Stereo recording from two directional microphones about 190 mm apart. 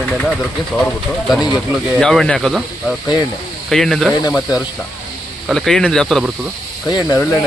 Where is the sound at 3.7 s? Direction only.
Centre (ahead or behind).